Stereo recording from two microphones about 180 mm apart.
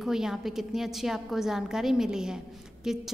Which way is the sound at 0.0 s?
5° right (ahead or behind).